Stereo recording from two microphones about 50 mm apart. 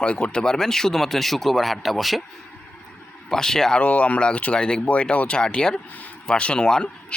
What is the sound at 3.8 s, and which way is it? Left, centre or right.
Speech, left.